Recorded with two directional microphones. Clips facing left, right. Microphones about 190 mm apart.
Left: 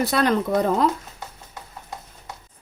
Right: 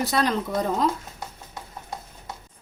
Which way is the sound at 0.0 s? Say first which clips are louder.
Left 3 dB; 60° left (ahead or behind).